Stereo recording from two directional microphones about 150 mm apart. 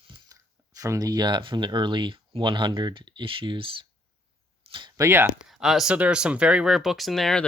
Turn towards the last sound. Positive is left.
turn(degrees=5)  # may be behind; listen again after turning